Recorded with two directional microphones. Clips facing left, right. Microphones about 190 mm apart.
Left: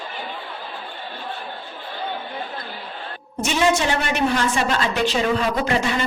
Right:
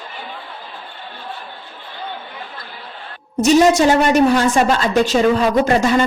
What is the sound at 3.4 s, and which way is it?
A woman's voice, 40° right (ahead or behind).